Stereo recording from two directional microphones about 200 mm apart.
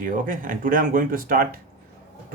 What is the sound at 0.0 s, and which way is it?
Speech, 45° right (ahead or behind).